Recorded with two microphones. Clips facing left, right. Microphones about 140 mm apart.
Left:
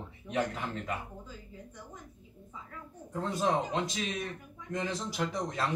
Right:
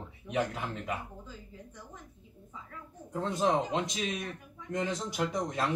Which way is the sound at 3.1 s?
20° right (ahead or behind).